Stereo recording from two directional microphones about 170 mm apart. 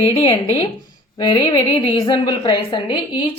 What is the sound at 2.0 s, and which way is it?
A woman's voice, 25° left (ahead or behind).